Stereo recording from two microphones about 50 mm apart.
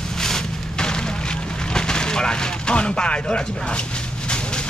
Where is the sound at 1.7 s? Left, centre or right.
Centre.